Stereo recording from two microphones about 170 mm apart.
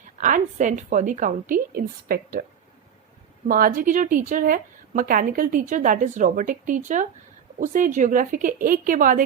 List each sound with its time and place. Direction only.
0.2 s a woman's voice: 50° right (ahead or behind)
3.4 s a woman's voice: 55° right (ahead or behind)